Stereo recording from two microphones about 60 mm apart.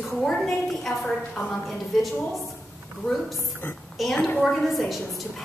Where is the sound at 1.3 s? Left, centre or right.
Centre.